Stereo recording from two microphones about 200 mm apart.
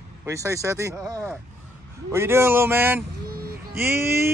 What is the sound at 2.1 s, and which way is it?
Speech, 10° right (ahead or behind).